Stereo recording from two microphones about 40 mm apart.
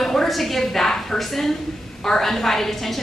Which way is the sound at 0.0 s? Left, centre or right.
Centre.